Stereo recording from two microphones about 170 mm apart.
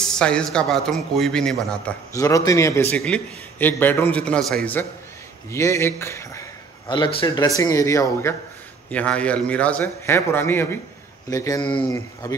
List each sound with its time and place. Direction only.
0.0 s speech: 5° left (ahead or behind)
2.1 s a man's voice: 20° left (ahead or behind)
6.9 s a man's voice: 30° left (ahead or behind)